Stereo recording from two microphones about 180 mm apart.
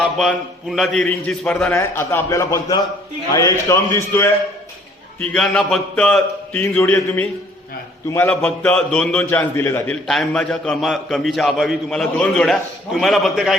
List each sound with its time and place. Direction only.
0.2 s a man's voice: centre (ahead or behind)
1.7 s a man's voice: 15° left (ahead or behind)
5.3 s a man's voice: 5° left (ahead or behind)